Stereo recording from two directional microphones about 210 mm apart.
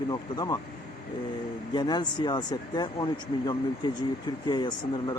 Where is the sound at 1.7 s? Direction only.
20° left (ahead or behind).